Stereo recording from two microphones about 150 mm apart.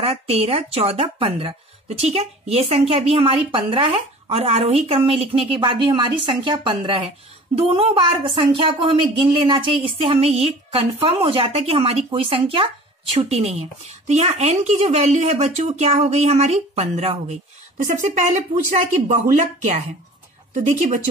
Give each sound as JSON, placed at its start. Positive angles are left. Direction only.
{"t": 0.0, "sound": "speech", "side_deg": -40}